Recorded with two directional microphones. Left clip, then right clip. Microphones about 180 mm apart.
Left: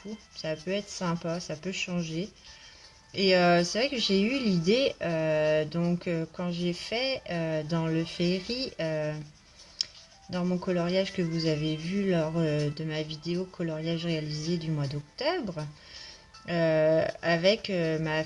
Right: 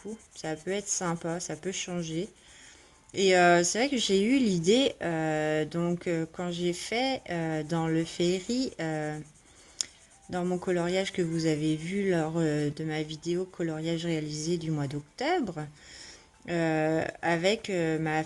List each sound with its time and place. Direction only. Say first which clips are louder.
0.3 s speech: left 1 dB; 40° right (ahead or behind)
10.2 s speech: right 1 dB; 40° right (ahead or behind)